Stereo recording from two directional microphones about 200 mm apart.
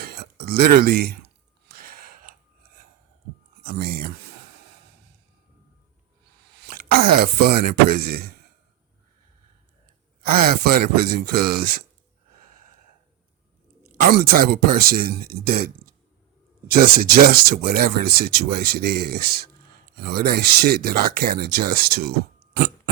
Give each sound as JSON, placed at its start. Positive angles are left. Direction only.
{"t": 0.0, "sound": "a sound", "side_deg": -50}
{"t": 3.7, "sound": "speech", "side_deg": -50}
{"t": 6.6, "sound": "speech", "side_deg": -45}
{"t": 10.2, "sound": "speech", "side_deg": -50}
{"t": 13.8, "sound": "speech", "side_deg": -45}